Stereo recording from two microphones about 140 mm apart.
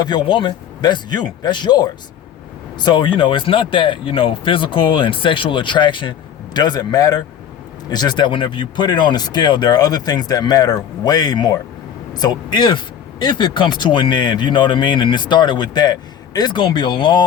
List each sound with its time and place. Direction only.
0.0 s speech: 30° left (ahead or behind)